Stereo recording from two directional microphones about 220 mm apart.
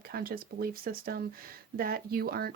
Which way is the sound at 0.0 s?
45° right (ahead or behind).